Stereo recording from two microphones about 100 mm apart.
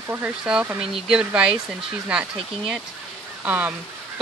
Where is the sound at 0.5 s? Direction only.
10° right (ahead or behind).